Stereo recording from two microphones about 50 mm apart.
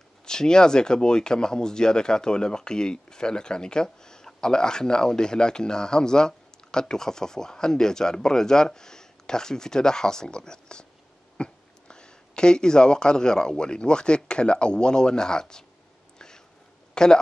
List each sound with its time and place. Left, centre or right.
0.2 s speech: centre
16.9 s speech: centre